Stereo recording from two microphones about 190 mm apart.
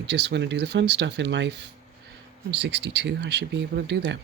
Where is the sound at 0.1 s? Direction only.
65° right (ahead or behind).